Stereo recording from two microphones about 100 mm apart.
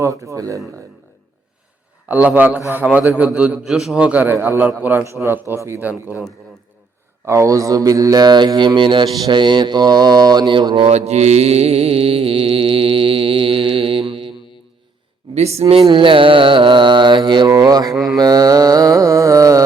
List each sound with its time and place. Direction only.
0.0 s mantra: 30° right (ahead or behind)
2.0 s a man's voice: 15° right (ahead or behind)
7.3 s mantra: 30° right (ahead or behind); by 10.8 s 50° right (ahead or behind)
10.8 s mantra: 90° right; by 14.3 s 65° right (ahead or behind)
15.4 s speech: 90° right
15.9 s mantra: 55° right (ahead or behind)
17.5 s mantra: 40° right (ahead or behind)